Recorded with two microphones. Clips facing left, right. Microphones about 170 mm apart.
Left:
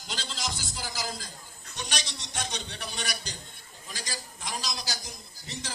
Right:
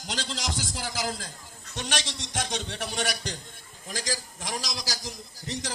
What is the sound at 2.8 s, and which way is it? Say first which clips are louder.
Speech: right 6 dB; 85° right.